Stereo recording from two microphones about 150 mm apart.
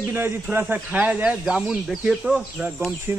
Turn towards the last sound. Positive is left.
turn(degrees=-15)  # may be behind; listen again after turning